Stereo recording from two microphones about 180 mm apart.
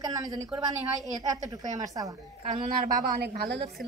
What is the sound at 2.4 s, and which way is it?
A woman's voice, 50° right (ahead or behind).